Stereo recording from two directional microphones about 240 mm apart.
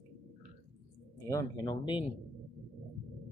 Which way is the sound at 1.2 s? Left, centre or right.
Centre.